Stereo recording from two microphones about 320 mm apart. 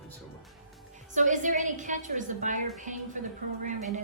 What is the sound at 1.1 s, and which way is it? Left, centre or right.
A woman's voice, right.